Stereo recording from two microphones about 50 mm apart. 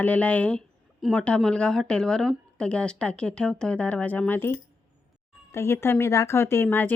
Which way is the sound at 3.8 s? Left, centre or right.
Left.